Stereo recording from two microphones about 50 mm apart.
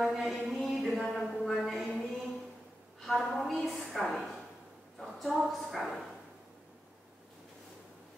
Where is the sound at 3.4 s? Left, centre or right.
Centre.